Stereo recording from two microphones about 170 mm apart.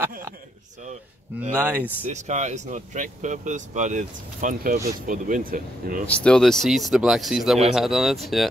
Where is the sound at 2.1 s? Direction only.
45° right (ahead or behind).